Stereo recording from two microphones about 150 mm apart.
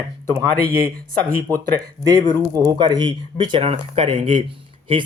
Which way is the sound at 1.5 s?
25° right (ahead or behind).